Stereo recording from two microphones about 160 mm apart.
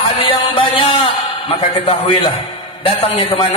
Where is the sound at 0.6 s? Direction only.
35° left (ahead or behind).